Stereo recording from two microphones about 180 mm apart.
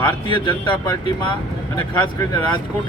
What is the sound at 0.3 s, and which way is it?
Speech, 25° left (ahead or behind).